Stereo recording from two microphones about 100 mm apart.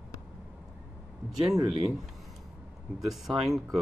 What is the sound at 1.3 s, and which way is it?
Speech, 5° right (ahead or behind).